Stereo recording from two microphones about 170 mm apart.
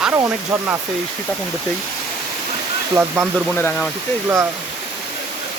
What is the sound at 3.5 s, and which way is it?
Speech, 15° left (ahead or behind).